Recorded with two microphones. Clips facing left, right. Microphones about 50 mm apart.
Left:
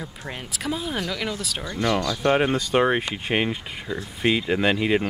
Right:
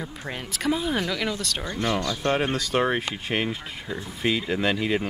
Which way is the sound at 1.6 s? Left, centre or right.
Centre.